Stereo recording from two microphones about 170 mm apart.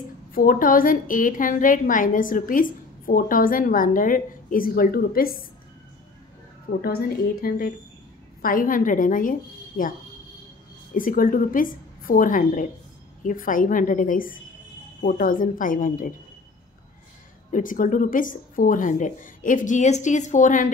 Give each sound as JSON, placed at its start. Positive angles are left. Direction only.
{"t": 0.3, "sound": "a woman's voice", "side_deg": 55}
{"t": 6.7, "sound": "a woman's voice", "side_deg": 70}
{"t": 11.0, "sound": "a woman's voice", "side_deg": 55}
{"t": 17.5, "sound": "a woman's voice", "side_deg": 50}